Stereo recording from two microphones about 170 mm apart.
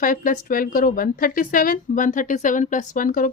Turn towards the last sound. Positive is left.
turn(degrees=55)  # may be behind; listen again after turning